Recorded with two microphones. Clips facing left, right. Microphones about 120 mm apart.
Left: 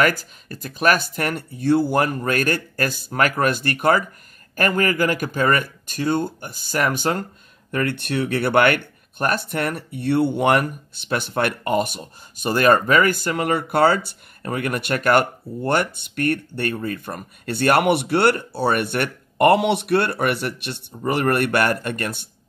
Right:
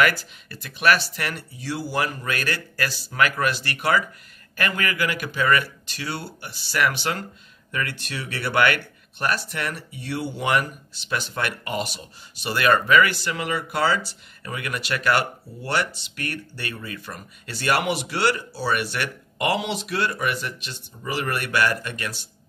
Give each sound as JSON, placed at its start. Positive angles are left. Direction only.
{"t": 0.0, "sound": "speech", "side_deg": 40}
{"t": 7.7, "sound": "speech", "side_deg": 55}